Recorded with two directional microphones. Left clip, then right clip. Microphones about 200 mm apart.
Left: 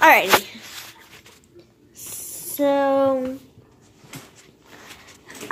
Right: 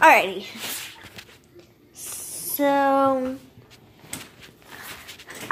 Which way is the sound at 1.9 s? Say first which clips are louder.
Even; centre (ahead or behind).